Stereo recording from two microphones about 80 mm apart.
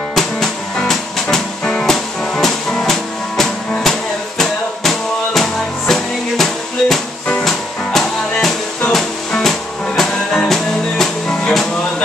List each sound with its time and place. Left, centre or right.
0.1 s music: centre